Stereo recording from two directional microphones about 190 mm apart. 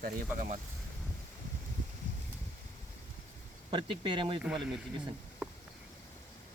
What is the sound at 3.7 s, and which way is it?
Speech, 25° right (ahead or behind).